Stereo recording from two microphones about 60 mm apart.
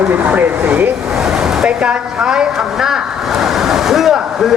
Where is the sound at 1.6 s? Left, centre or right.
Centre.